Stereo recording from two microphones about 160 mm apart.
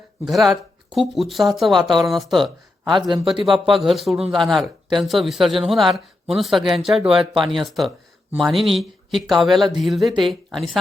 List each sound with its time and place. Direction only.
0.3 s speech: centre (ahead or behind)
2.9 s speech: 30° right (ahead or behind)
3.4 s speech: centre (ahead or behind)